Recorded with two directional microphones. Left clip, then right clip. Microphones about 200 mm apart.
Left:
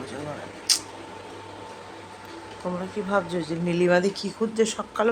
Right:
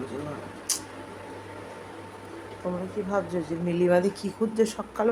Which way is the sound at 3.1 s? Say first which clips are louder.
Left 3 dB; centre (ahead or behind).